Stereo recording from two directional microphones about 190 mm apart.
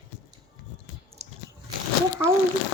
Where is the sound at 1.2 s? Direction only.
35° right (ahead or behind).